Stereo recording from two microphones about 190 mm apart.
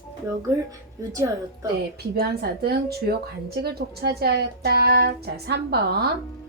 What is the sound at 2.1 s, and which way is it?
Speech, 55° right (ahead or behind).